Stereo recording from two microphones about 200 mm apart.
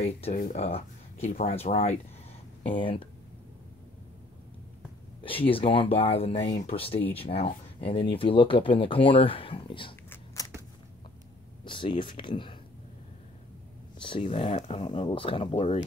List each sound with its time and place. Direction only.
0.3 s speech: 40° left (ahead or behind); by 3.1 s 25° left (ahead or behind)
5.2 s speech: 25° left (ahead or behind)
10.0 s a sound: 15° left (ahead or behind)
11.6 s speech: 25° left (ahead or behind)
14.0 s speech: 30° left (ahead or behind)